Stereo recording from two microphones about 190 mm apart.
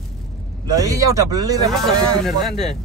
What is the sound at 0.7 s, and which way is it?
Speech, 20° right (ahead or behind).